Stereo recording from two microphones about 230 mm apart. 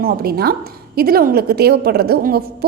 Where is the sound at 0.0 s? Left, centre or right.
Right.